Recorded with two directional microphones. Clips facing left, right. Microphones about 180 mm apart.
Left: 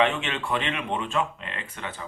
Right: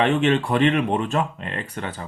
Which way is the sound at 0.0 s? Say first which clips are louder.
Right 6 dB; 40° right (ahead or behind).